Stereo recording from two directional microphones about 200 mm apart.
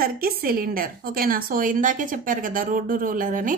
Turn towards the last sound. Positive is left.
turn(degrees=-40)  # may be behind; listen again after turning